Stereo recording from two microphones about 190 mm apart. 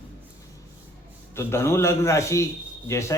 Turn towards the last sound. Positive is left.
turn(degrees=15)  # may be behind; listen again after turning